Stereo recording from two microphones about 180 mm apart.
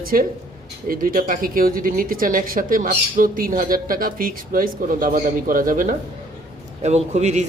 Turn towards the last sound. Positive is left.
turn(degrees=-40)  # may be behind; listen again after turning